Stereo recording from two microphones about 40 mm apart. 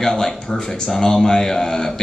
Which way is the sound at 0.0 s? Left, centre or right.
Centre.